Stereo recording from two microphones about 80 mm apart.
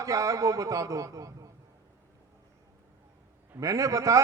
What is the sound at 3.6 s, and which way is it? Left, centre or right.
Speech, right.